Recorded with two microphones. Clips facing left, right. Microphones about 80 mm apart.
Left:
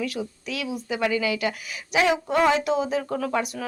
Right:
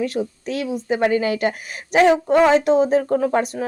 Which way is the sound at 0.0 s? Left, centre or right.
Right.